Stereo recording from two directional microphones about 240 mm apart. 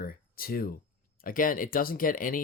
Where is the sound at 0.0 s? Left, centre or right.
Left.